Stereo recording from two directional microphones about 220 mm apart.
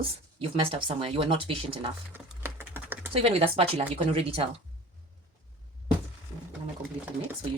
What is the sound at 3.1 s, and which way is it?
Speech, 25° right (ahead or behind).